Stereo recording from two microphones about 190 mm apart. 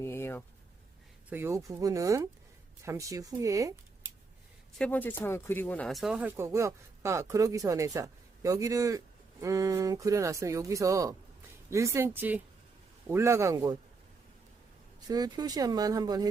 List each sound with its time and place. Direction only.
0.0 s a sound: 15° left (ahead or behind)
1.3 s speech: 10° right (ahead or behind)
4.8 s speech: 10° left (ahead or behind); by 13.7 s 15° right (ahead or behind)
15.0 s speech: 20° right (ahead or behind)